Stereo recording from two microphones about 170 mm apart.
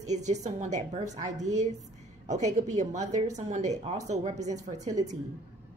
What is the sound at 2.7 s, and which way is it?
A woman's voice, 45° right (ahead or behind).